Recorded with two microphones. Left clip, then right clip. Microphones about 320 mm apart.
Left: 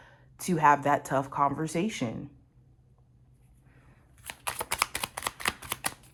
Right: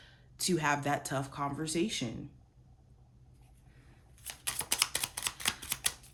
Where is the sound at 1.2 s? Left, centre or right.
Centre.